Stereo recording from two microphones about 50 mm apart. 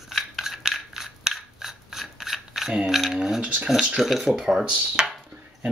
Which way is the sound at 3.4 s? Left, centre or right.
Right.